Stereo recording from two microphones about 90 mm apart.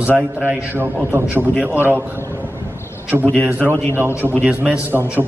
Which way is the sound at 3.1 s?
20° right (ahead or behind).